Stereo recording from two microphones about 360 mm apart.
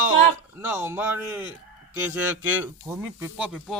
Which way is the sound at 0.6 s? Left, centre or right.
Centre.